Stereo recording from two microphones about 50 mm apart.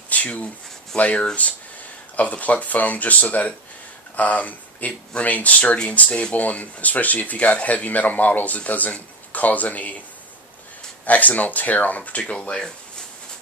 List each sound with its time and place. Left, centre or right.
0.1 s speech: left
11.1 s speech: left
12.4 s speech: centre